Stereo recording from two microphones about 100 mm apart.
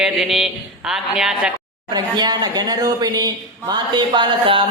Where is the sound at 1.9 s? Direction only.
45° right (ahead or behind).